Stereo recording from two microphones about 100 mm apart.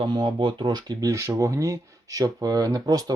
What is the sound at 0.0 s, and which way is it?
Speech, 55° right (ahead or behind).